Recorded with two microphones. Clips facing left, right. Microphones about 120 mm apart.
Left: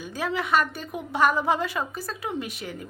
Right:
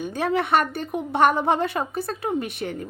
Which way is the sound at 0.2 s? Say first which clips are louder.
Right 3 dB; 55° right (ahead or behind).